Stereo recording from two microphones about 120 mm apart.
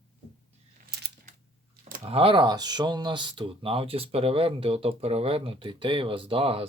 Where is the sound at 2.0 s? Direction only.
50° right (ahead or behind).